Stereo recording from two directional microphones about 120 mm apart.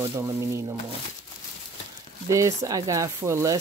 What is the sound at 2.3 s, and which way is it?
Speech, 25° right (ahead or behind).